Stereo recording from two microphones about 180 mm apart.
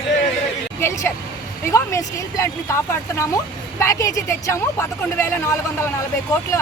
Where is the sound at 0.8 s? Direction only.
15° left (ahead or behind).